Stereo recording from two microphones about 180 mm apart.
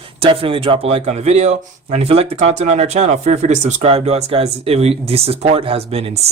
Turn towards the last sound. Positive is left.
turn(degrees=-35)  # may be behind; listen again after turning